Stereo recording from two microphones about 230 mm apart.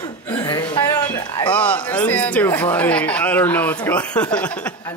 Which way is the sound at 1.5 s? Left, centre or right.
Centre.